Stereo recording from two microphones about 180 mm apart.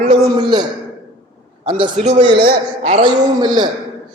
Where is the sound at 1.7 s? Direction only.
25° right (ahead or behind).